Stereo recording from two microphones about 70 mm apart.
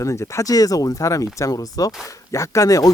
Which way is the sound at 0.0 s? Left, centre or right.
Left.